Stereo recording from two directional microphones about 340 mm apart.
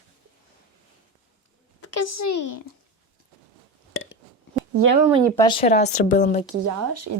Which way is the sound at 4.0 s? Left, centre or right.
Left.